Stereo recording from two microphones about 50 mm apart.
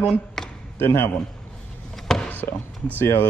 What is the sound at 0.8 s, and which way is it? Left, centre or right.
Speech, left.